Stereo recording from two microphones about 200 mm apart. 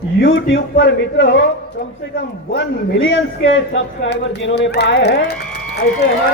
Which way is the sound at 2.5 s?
70° left (ahead or behind).